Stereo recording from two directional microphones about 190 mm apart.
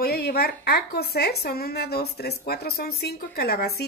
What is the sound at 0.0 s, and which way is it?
Speech, 55° left (ahead or behind).